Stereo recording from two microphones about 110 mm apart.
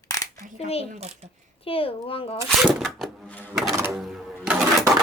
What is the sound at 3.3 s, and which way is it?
Speech, 15° left (ahead or behind).